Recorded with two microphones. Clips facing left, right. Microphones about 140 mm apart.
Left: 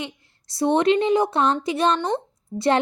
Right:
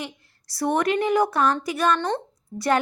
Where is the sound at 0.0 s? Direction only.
20° left (ahead or behind).